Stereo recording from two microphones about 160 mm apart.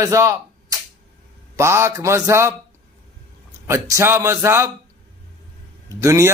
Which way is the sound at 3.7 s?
20° right (ahead or behind).